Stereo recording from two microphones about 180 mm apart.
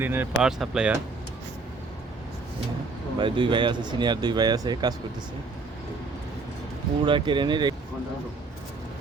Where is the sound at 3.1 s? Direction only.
25° right (ahead or behind).